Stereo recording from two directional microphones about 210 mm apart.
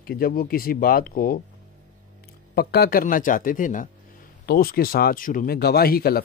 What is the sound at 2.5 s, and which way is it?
Speech, 45° left (ahead or behind).